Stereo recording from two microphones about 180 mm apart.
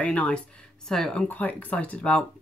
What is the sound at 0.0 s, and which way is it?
A woman's voice, 5° left (ahead or behind).